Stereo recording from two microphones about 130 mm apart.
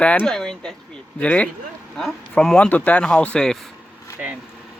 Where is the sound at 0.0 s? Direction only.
10° left (ahead or behind).